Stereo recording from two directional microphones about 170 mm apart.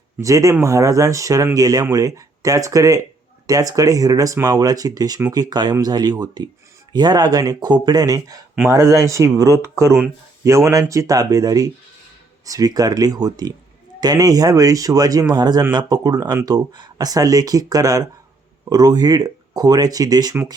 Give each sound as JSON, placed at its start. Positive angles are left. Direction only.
{"t": 0.2, "sound": "speech", "side_deg": -20}